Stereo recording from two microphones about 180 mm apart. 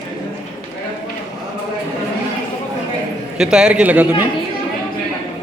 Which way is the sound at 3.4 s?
5° right (ahead or behind).